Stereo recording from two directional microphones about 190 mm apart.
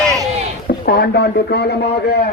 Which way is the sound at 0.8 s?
55° left (ahead or behind).